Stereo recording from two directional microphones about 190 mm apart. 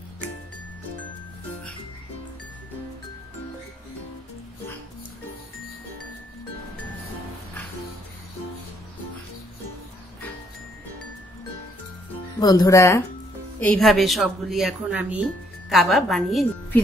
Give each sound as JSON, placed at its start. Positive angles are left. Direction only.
{"t": 12.4, "sound": "speech", "side_deg": 20}
{"t": 13.6, "sound": "speech", "side_deg": 5}